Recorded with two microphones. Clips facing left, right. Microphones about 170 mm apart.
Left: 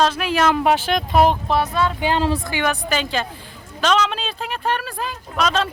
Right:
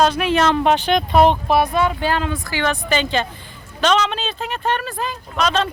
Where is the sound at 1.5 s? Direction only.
10° right (ahead or behind).